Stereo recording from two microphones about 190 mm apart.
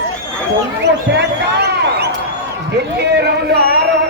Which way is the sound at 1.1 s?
60° right (ahead or behind).